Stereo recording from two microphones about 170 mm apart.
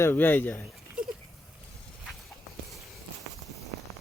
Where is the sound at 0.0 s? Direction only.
10° left (ahead or behind).